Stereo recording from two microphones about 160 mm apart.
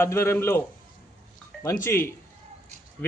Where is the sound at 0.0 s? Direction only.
15° left (ahead or behind).